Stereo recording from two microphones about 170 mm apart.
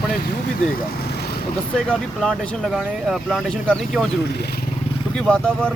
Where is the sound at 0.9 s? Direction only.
70° left (ahead or behind).